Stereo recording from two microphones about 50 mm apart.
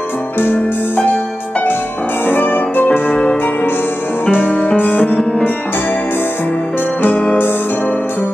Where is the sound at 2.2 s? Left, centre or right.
Left.